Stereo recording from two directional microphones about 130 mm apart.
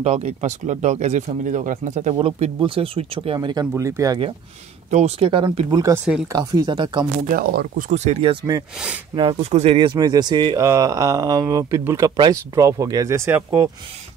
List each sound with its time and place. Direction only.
0.0 s speech: 55° right (ahead or behind)
2.1 s speech: 50° right (ahead or behind)
3.3 s speech: 30° right (ahead or behind)
4.9 s speech: 50° right (ahead or behind)
7.9 s speech: 55° right (ahead or behind)
8.7 s speech: 5° right (ahead or behind)
9.1 s speech: 40° right (ahead or behind)
9.5 s speech: 60° right (ahead or behind)
9.8 s speech: 35° right (ahead or behind); by 13.7 s 20° right (ahead or behind)